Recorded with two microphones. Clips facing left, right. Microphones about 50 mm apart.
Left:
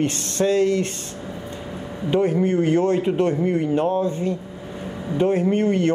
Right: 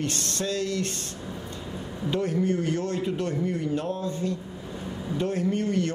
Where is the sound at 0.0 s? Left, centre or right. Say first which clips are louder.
Left 8 dB; left.